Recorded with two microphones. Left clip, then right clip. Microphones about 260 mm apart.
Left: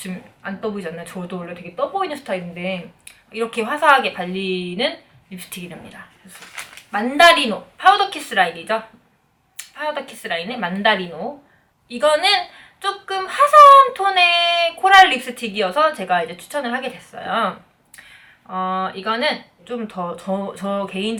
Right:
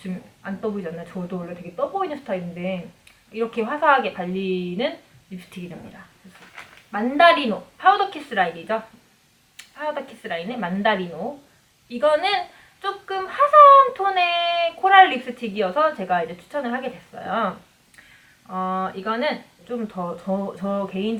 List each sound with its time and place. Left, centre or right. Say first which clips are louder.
0.0 s a woman's voice: left 4 dB; centre
1.7 s speech: left 3 dB; right
2.0 s a woman's voice: left 3 dB; centre
11.1 s speech: left 2 dB; right
11.9 s a woman's voice: left 3 dB; centre